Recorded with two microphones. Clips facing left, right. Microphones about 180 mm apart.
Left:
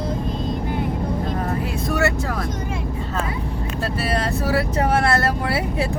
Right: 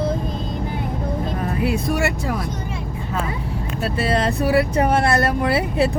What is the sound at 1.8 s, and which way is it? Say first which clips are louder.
Vehicle: even; 15° right (ahead or behind).